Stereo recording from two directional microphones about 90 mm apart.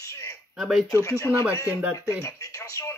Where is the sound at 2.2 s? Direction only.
35° left (ahead or behind).